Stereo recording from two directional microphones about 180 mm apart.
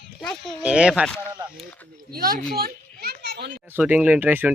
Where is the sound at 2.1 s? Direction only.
55° right (ahead or behind).